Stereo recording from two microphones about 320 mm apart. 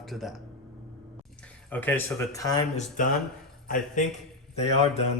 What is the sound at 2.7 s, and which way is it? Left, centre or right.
Speech, left.